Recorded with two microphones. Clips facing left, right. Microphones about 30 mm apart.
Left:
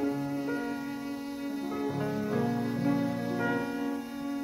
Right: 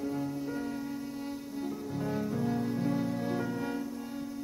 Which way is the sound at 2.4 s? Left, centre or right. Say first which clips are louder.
Left 2 dB; centre.